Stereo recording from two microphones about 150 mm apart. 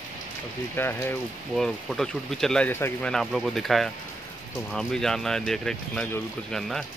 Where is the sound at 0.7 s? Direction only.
15° left (ahead or behind).